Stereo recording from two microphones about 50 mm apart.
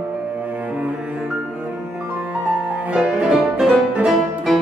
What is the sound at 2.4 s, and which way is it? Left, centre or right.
Music, right.